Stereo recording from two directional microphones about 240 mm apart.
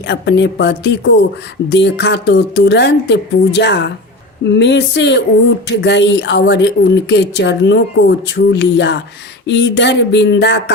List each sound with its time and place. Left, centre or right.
0.1 s a woman's voice: left